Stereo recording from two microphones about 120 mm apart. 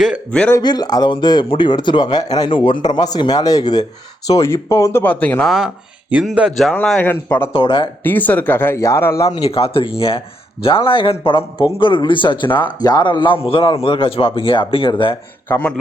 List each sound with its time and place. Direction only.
0.3 s speech: 10° left (ahead or behind)
0.6 s speech: 35° left (ahead or behind); by 5.5 s 15° left (ahead or behind)
5.5 s speech: 5° right (ahead or behind)
7.0 s speech: 15° left (ahead or behind)
7.5 s a man's voice: 45° left (ahead or behind)
8.0 s speech: 15° left (ahead or behind)
9.5 s a man's voice: 55° left (ahead or behind)
15.4 s speech: 15° left (ahead or behind)